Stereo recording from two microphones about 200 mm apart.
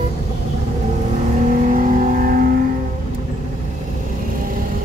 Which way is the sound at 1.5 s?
40° right (ahead or behind).